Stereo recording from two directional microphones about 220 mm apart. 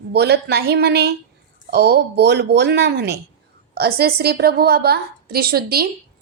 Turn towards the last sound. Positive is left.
turn(degrees=-45)  # may be behind; listen again after turning